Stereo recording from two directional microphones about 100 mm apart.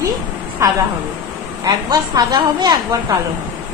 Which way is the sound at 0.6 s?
30° right (ahead or behind).